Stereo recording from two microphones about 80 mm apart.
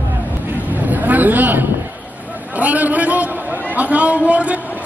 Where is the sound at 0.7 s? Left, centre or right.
Right.